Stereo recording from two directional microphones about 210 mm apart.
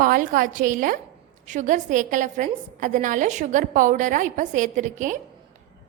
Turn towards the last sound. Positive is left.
turn(degrees=-35)  # may be behind; listen again after turning